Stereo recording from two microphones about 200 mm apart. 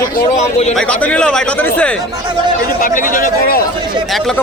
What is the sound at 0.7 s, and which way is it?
Speech, 5° left (ahead or behind).